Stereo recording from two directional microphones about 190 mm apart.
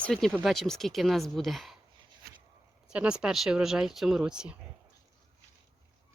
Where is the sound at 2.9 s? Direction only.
5° right (ahead or behind).